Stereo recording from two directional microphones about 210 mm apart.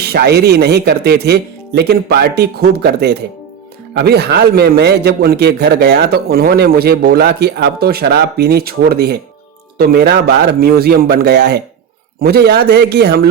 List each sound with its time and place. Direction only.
0.0 s a man's voice: 50° right (ahead or behind)